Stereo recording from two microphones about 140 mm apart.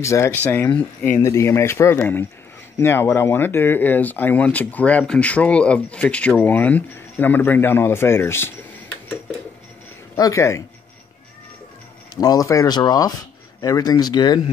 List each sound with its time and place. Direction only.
0.0 s speech: 20° left (ahead or behind)
10.1 s speech: 25° left (ahead or behind)
12.2 s speech: 25° left (ahead or behind)